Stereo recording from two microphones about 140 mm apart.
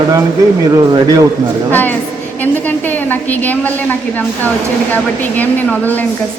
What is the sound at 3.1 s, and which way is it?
Speech, 10° left (ahead or behind).